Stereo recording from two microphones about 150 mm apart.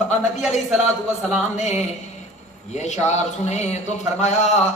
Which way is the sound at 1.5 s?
50° left (ahead or behind).